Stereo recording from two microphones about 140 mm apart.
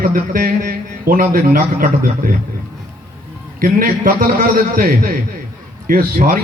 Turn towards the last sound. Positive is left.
turn(degrees=-90)